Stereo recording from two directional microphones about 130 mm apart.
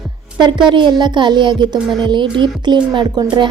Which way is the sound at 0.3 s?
35° right (ahead or behind).